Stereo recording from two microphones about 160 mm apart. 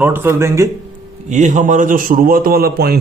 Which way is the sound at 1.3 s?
50° right (ahead or behind).